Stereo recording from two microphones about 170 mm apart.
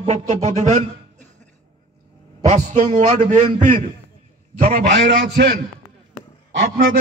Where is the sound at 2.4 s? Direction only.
45° right (ahead or behind).